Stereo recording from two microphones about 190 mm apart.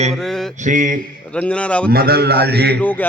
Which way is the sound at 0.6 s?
40° right (ahead or behind).